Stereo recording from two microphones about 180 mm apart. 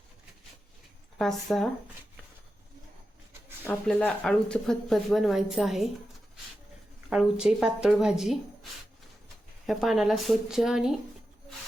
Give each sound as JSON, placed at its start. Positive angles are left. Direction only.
{"t": 1.2, "sound": "speech", "side_deg": 0}
{"t": 3.6, "sound": "speech", "side_deg": 10}
{"t": 7.1, "sound": "speech", "side_deg": -5}
{"t": 9.6, "sound": "speech", "side_deg": 0}